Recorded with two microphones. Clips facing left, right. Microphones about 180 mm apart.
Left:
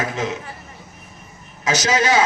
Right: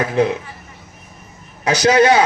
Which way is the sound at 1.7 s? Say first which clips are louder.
Right 6 dB; 60° right (ahead or behind).